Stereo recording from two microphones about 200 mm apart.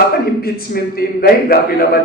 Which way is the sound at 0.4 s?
50° left (ahead or behind).